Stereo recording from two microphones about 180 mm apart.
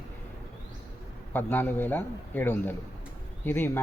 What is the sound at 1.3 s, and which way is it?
A man's voice, 10° left (ahead or behind).